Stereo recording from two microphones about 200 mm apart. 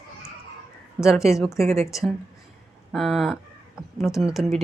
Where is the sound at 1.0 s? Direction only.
Centre (ahead or behind).